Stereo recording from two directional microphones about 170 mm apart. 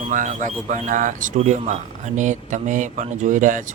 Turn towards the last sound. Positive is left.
turn(degrees=-50)  # may be behind; listen again after turning